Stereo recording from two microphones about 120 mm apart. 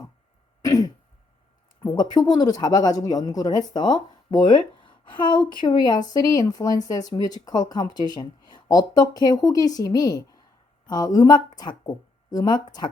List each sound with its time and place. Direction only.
0.6 s throat clearing: 30° left (ahead or behind)
1.8 s speech: 35° left (ahead or behind)